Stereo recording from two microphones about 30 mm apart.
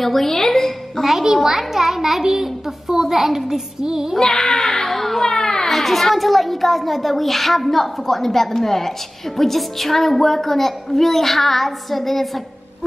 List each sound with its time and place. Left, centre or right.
0.0 s a woman's voice: centre
1.2 s a child's voice: centre
4.2 s a child's voice: left
5.2 s a sound: left
5.7 s a child's voice: centre